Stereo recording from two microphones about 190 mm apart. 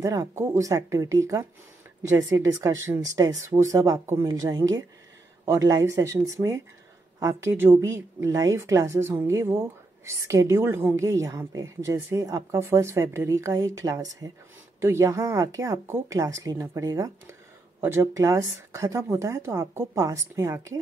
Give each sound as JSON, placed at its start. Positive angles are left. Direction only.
{"t": 0.0, "sound": "a woman's voice", "side_deg": -15}